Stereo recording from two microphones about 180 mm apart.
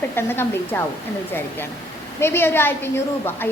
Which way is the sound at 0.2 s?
10° left (ahead or behind).